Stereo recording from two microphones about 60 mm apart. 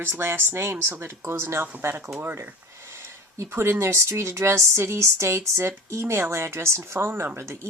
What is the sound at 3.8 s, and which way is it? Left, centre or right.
A woman's voice, right.